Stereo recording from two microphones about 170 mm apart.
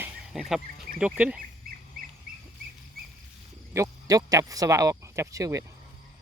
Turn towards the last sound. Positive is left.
turn(degrees=-20)  # may be behind; listen again after turning